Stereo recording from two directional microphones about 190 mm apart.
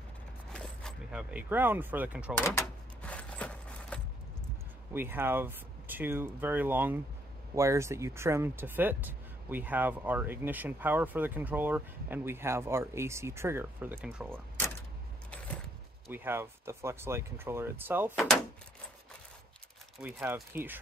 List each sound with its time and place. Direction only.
0.5 s a sound: 5° left (ahead or behind)
1.3 s speech: 10° right (ahead or behind)
2.6 s a sound: 5° left (ahead or behind)
4.9 s speech: 10° right (ahead or behind)
16.1 s speech: 10° right (ahead or behind)
20.0 s speech: 10° right (ahead or behind)